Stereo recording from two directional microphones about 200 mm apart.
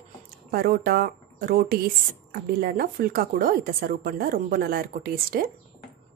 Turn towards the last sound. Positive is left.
turn(degrees=-45)  # may be behind; listen again after turning